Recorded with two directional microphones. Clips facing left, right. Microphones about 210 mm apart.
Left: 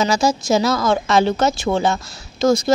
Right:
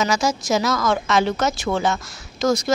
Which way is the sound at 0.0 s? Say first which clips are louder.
Left 3 dB; 30° left (ahead or behind).